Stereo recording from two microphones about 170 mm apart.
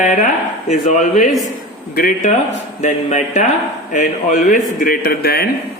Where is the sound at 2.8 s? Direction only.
45° left (ahead or behind); by 5.5 s 65° left (ahead or behind).